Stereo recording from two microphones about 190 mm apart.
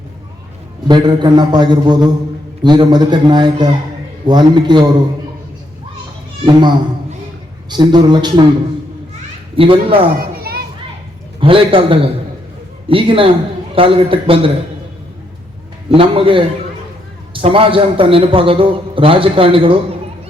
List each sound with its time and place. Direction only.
0.9 s a man's voice: 25° right (ahead or behind)
6.4 s a man's voice: 25° right (ahead or behind)
9.6 s a man's voice: 30° right (ahead or behind)
10.2 s children playing: 50° right (ahead or behind)
11.3 s a man's voice: 30° right (ahead or behind)
15.9 s a man's voice: 30° right (ahead or behind)